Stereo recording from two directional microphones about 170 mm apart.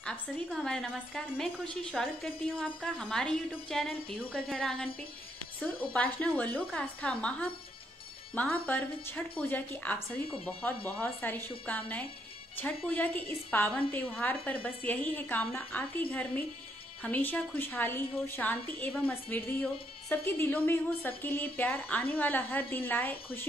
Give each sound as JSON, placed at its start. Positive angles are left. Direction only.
{"t": 0.0, "sound": "a woman's voice", "side_deg": 0}
{"t": 5.9, "sound": "a woman's voice", "side_deg": 10}
{"t": 8.6, "sound": "a woman's voice", "side_deg": 10}